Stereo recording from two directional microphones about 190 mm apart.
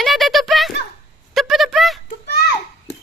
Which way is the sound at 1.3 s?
Centre (ahead or behind).